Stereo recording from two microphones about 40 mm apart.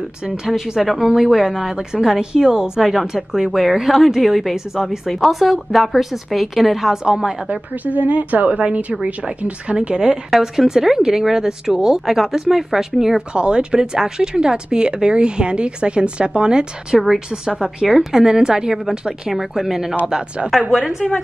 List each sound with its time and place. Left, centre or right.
0.5 s speech: centre
1.8 s speech: centre
2.8 s a woman's voice: centre
6.9 s speech: centre
7.4 s a woman's voice: right
10.3 s speech: centre
13.3 s speech: right
21.0 s a woman's voice: centre